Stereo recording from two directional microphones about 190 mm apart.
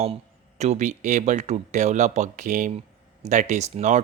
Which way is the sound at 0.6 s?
35° right (ahead or behind).